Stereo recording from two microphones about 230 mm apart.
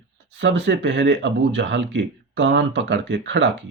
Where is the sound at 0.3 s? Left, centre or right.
Right.